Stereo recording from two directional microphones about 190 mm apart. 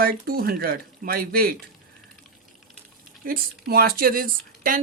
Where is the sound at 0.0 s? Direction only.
50° right (ahead or behind).